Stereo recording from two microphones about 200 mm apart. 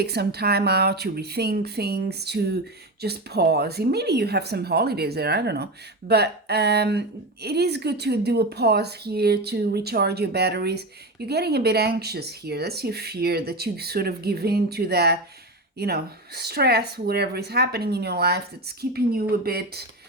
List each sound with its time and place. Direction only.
0.0 s speech: 55° right (ahead or behind)